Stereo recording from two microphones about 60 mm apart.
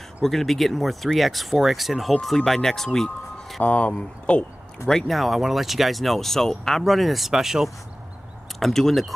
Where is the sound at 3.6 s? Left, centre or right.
Left.